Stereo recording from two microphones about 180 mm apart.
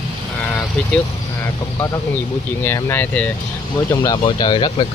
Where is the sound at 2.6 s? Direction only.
15° left (ahead or behind).